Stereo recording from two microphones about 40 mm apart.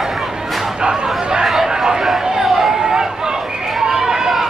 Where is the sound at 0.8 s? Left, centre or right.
Right.